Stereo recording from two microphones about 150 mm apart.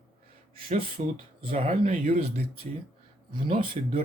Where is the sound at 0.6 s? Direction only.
40° right (ahead or behind).